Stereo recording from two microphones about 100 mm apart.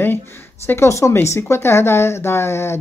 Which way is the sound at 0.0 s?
20° left (ahead or behind).